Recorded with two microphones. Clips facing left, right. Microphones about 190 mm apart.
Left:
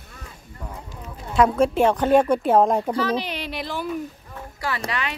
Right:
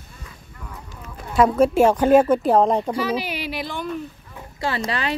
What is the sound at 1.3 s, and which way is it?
Speech, 5° right (ahead or behind).